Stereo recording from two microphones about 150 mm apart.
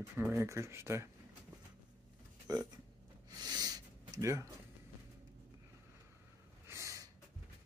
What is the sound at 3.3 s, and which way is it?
Snort, 25° right (ahead or behind).